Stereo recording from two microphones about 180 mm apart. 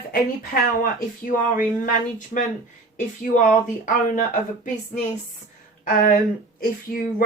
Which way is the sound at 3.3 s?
45° left (ahead or behind).